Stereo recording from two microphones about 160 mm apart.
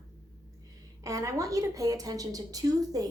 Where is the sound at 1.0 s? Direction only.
20° right (ahead or behind).